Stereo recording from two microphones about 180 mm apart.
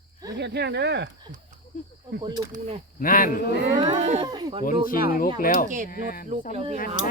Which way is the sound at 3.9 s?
35° right (ahead or behind).